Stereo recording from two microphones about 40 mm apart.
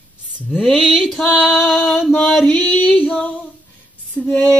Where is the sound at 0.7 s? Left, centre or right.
Centre.